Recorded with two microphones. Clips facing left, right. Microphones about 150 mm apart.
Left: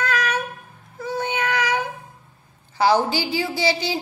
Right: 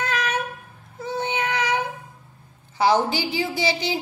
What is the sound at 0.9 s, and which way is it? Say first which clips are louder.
Child singing: left 1 dB; 25° right (ahead or behind).